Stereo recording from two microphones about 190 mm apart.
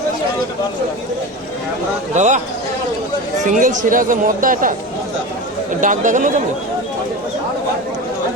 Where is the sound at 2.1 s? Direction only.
40° right (ahead or behind).